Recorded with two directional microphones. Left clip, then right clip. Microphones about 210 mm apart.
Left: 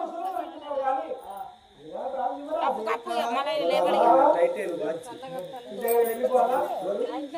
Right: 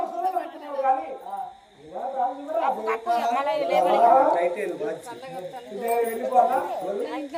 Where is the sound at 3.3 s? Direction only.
50° left (ahead or behind).